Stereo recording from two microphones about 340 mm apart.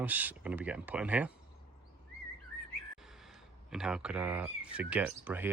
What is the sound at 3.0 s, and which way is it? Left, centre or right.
Speech, centre.